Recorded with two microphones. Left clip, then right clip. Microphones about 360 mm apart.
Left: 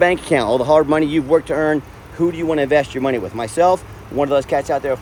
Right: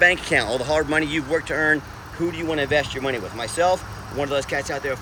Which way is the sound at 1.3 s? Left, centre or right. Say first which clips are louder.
Left 4 dB; left.